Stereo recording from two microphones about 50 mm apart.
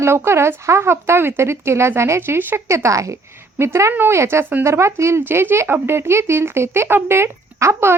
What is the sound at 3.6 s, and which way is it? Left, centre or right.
Speech, right.